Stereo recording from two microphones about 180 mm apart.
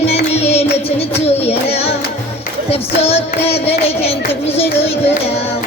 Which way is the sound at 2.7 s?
35° left (ahead or behind).